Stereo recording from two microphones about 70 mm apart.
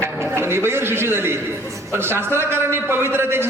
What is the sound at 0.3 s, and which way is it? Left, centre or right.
A man's voice, right.